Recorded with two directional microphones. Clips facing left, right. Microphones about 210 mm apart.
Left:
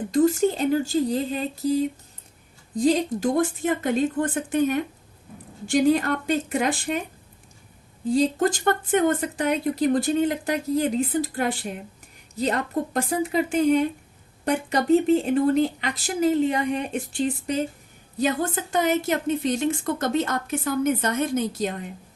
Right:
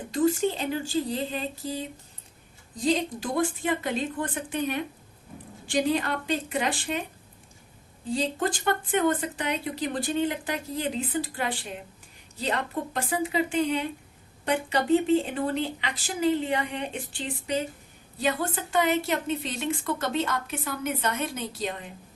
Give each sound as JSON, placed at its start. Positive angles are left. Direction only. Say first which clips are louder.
{"t": 0.1, "sound": "speech", "louder": "left 4 dB", "side_deg": 45}
{"t": 2.7, "sound": "speech", "louder": "left 5 dB", "side_deg": 45}
{"t": 8.1, "sound": "speech", "louder": "left 7 dB", "side_deg": 45}
{"t": 18.7, "sound": "speech", "louder": "left 2 dB", "side_deg": 45}